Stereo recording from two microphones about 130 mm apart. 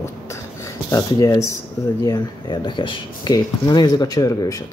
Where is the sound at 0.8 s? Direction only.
25° left (ahead or behind).